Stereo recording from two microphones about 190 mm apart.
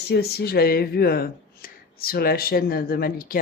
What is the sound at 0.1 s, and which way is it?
Speech, 55° left (ahead or behind).